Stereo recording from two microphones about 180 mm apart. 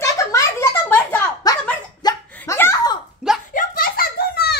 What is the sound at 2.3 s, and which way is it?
Laughter, 10° left (ahead or behind).